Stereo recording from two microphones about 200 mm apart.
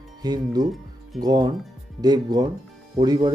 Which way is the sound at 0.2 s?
20° right (ahead or behind).